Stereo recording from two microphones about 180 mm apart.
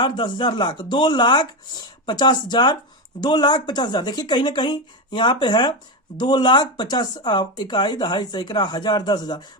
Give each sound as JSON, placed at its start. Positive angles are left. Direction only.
{"t": 0.0, "sound": "speech", "side_deg": 25}